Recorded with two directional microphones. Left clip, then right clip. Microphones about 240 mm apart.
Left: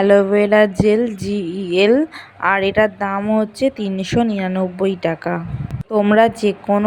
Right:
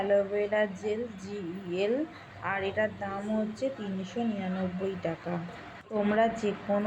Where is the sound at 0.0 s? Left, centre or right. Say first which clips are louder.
Left 14 dB; left.